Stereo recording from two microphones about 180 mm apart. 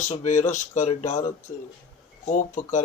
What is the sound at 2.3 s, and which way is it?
Speech, 40° left (ahead or behind).